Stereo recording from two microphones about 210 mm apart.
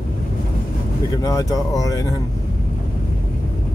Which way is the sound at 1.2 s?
15° left (ahead or behind).